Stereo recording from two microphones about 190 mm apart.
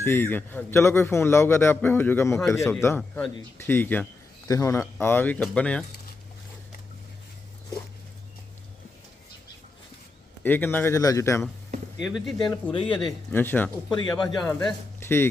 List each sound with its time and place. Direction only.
0.0 s a man's voice: 15° left (ahead or behind)
3.0 s a man's voice: centre (ahead or behind)
10.4 s a man's voice: 10° left (ahead or behind)
11.9 s a man's voice: centre (ahead or behind)
12.7 s a man's voice: 25° left (ahead or behind)
13.3 s a man's voice: 10° left (ahead or behind)